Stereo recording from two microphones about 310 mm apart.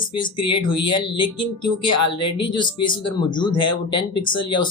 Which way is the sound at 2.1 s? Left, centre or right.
Left.